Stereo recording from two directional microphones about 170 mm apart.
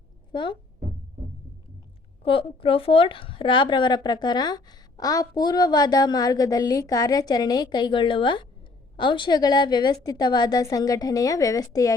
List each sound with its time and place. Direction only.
0.3 s speech: 30° left (ahead or behind)
2.2 s a woman's voice: 30° left (ahead or behind)